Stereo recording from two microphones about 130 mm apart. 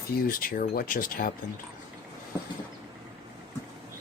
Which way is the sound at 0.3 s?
90° left.